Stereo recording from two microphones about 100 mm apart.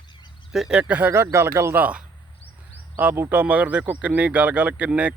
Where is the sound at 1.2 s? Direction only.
30° right (ahead or behind).